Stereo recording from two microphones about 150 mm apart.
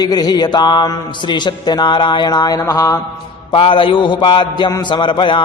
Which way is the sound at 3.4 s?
35° left (ahead or behind).